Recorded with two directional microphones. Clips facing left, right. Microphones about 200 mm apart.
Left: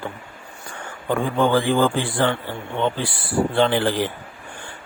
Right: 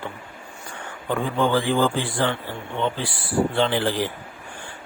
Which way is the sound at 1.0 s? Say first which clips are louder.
Left 3 dB; 50° left (ahead or behind).